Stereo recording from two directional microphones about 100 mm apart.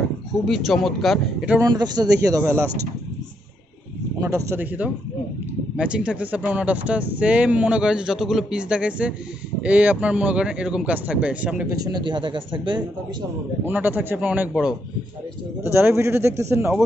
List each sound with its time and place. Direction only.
0.5 s speech: centre (ahead or behind)
1.7 s speech: 45° right (ahead or behind)
4.2 s a man's voice: 30° right (ahead or behind)
4.6 s speech: 15° right (ahead or behind)
11.8 s speech: 45° right (ahead or behind)
13.7 s speech: 20° right (ahead or behind)
15.6 s a man's voice: 25° right (ahead or behind)